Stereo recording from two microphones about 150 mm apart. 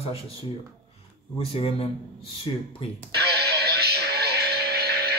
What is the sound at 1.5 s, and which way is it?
Speech, 40° left (ahead or behind).